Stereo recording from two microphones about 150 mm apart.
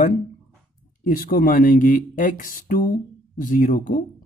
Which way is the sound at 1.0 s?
70° left (ahead or behind).